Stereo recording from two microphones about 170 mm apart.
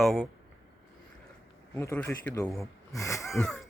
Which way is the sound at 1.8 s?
15° left (ahead or behind).